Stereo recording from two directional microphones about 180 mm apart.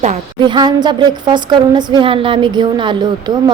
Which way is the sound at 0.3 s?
25° right (ahead or behind).